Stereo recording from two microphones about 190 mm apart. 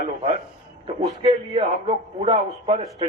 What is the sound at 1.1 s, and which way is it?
A man's voice, 25° right (ahead or behind).